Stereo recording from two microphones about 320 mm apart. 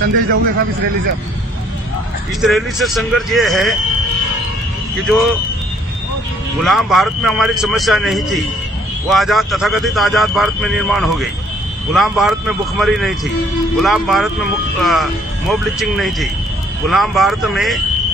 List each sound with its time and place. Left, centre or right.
0.0 s speech: right
2.4 s a man's voice: centre
6.6 s a man's voice: centre